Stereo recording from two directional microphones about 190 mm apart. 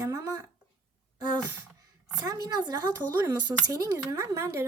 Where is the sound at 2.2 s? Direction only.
20° right (ahead or behind).